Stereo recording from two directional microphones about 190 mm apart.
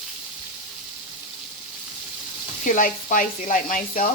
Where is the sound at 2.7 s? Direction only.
45° left (ahead or behind).